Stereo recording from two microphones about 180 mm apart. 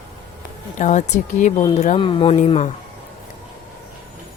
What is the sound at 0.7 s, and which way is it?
Speech, 40° left (ahead or behind).